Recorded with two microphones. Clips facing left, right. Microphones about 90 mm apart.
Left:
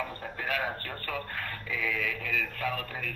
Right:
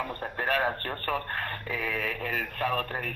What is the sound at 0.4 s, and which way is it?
Speech, 45° right (ahead or behind).